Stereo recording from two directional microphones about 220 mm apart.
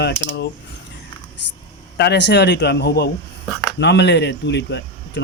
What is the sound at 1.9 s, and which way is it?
Speech, 50° left (ahead or behind).